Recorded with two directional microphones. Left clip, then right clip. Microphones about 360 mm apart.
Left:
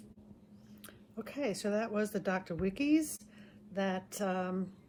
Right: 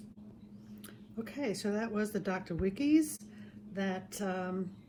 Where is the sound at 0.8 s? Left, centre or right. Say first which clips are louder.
Right 1 dB; centre.